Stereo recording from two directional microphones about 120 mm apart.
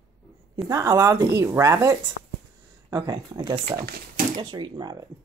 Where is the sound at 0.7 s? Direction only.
25° right (ahead or behind).